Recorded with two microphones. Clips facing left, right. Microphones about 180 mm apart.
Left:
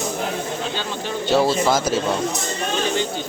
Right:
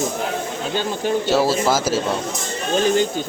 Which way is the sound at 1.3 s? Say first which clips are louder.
Left 2 dB; 5° right (ahead or behind).